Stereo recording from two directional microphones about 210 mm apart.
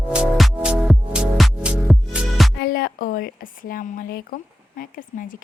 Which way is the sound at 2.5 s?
45° left (ahead or behind).